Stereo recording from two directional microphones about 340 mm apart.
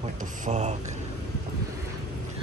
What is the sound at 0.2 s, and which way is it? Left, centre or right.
Speech, centre.